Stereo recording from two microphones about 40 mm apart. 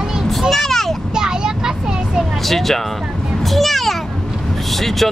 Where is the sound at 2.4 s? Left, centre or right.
Centre.